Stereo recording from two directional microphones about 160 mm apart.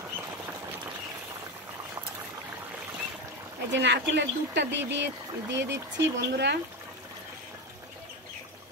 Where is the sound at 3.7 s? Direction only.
90° right.